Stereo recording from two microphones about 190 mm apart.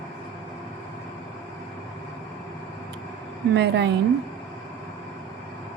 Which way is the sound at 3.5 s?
65° right (ahead or behind).